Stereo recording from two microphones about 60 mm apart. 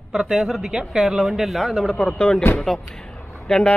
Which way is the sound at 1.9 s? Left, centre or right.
Centre.